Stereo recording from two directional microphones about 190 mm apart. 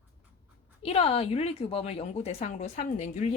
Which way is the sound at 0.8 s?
30° left (ahead or behind).